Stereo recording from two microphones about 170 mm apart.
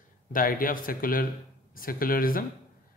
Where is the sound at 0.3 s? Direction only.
55° left (ahead or behind).